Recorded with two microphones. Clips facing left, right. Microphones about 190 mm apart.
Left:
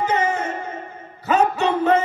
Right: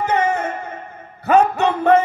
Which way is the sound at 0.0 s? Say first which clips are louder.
Right 2 dB; 60° right (ahead or behind).